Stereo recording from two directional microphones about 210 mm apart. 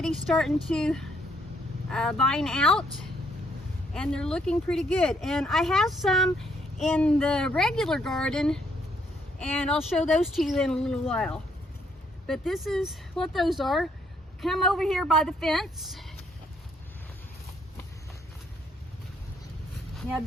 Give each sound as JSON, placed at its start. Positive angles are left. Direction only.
{"t": 0.0, "sound": "speech", "side_deg": 0}
{"t": 3.9, "sound": "speech", "side_deg": 5}